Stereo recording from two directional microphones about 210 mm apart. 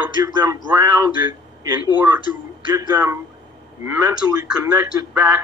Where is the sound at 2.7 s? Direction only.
15° right (ahead or behind).